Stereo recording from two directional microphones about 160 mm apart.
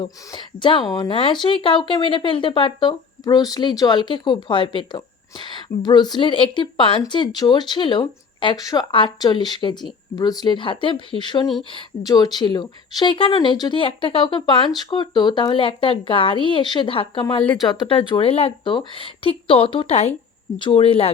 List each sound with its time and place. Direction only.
0.3 s speech: 30° left (ahead or behind)
20.6 s speech: 30° left (ahead or behind)